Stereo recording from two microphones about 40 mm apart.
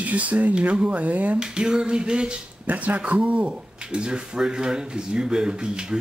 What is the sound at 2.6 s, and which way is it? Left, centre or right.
Speech, right.